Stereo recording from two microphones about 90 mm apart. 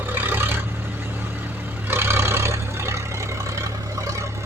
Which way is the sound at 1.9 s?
25° right (ahead or behind).